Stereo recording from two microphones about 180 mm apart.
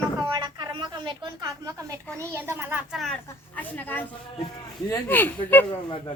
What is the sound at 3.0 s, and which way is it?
A woman's voice, 5° left (ahead or behind).